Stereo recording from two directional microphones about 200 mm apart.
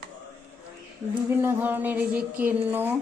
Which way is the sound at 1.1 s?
10° right (ahead or behind).